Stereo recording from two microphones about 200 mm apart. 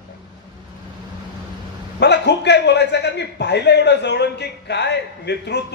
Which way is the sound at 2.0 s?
60° left (ahead or behind).